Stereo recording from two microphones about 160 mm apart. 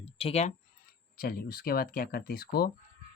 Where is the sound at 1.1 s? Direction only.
70° left (ahead or behind).